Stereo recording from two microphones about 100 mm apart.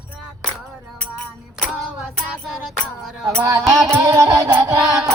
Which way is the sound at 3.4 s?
40° right (ahead or behind).